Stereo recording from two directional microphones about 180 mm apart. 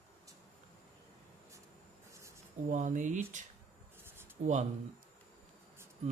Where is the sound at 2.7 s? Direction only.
45° right (ahead or behind).